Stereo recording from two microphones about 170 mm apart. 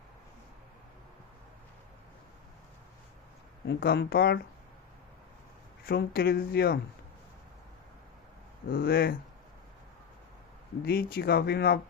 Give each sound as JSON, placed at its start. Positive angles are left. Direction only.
{"t": 3.7, "sound": "speech", "side_deg": 75}
{"t": 5.8, "sound": "speech", "side_deg": 65}
{"t": 8.7, "sound": "speech", "side_deg": 60}
{"t": 10.8, "sound": "speech", "side_deg": 65}